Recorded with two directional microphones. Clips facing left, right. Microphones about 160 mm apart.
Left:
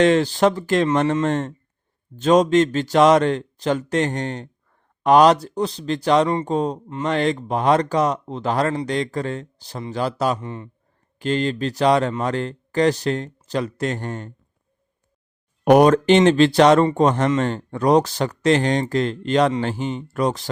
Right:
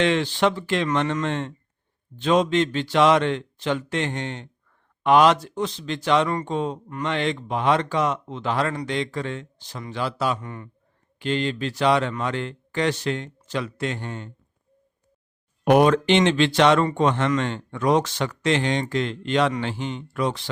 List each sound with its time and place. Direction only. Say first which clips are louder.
0.0 s speech: left 5 dB; 40° left (ahead or behind)
10.4 s speech: left 4 dB; 25° left (ahead or behind)
11.2 s speech: left 3 dB; 40° left (ahead or behind)
15.7 s speech: left 4 dB; 40° left (ahead or behind)